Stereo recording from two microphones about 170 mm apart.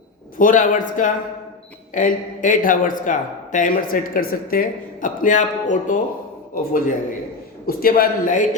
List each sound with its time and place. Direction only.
0.3 s a man's voice: 50° left (ahead or behind)